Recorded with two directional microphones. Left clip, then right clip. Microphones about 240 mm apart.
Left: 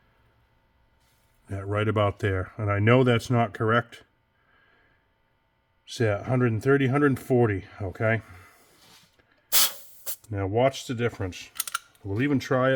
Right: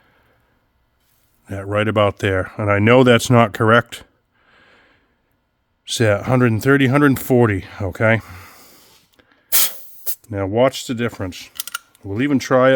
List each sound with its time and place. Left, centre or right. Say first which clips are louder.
1.5 s speech: right 8 dB; right
4.5 s snort: right 11 dB; right
5.8 s speech: right 10 dB; right
9.5 s spray: right 3 dB; centre
10.3 s speech: right 7 dB; right